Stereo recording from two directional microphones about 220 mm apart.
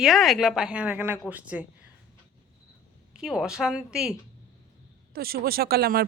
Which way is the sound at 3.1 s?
Centre (ahead or behind).